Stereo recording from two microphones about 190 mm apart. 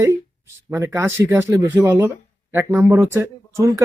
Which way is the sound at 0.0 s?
15° right (ahead or behind).